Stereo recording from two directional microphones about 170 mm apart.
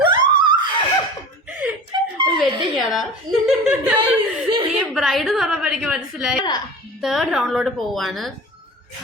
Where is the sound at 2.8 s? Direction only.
Centre (ahead or behind).